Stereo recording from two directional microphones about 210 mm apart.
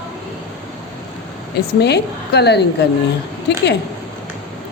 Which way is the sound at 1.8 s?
50° left (ahead or behind).